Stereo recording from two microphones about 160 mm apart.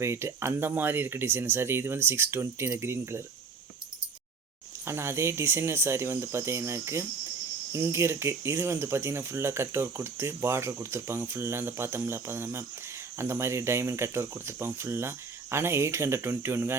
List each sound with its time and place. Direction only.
0.0 s speech: 15° right (ahead or behind)
4.9 s speech: 15° right (ahead or behind)